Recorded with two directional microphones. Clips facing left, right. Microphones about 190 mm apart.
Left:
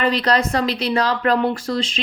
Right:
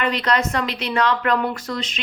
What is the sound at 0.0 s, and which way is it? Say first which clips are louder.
A woman's voice: left 3 dB; 35° left (ahead or behind).